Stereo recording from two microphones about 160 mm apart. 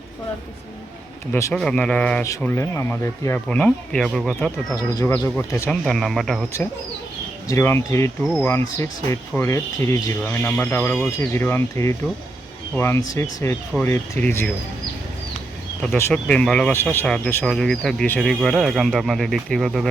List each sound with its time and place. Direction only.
1.3 s speech: 20° left (ahead or behind)
1.5 s speech: 5° left (ahead or behind)
4.7 s speech: 20° left (ahead or behind)
5.8 s speech: centre (ahead or behind)
7.4 s speech: 15° left (ahead or behind)
15.8 s speech: 15° left (ahead or behind)